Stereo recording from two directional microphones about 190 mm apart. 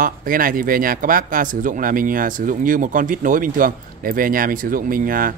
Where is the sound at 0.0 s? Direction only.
45° right (ahead or behind).